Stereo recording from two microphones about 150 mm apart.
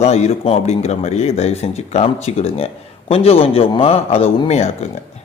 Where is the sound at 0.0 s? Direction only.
45° left (ahead or behind).